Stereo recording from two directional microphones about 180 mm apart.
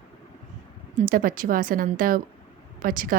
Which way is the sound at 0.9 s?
50° right (ahead or behind).